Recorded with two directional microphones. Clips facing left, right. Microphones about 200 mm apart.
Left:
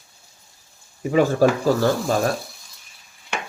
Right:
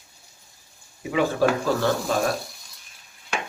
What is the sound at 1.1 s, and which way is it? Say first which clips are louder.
Speech: left 4 dB; 40° left (ahead or behind).